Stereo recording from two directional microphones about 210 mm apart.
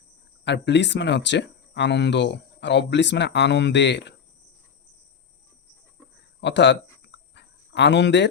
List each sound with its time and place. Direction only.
0.4 s speech: 55° left (ahead or behind)
6.4 s speech: 55° left (ahead or behind)
7.3 s a sound: 55° left (ahead or behind)